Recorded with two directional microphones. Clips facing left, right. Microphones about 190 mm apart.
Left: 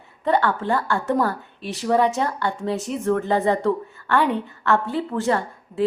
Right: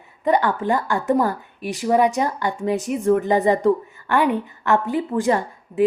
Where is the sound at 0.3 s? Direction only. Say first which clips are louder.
Right 2 dB; 15° right (ahead or behind).